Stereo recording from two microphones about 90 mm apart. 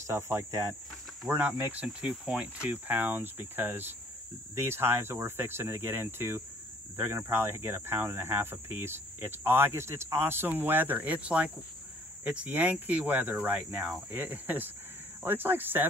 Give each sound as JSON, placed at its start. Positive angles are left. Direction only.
{"t": 0.0, "sound": "cricket", "side_deg": -30}
{"t": 1.7, "sound": "speech", "side_deg": -15}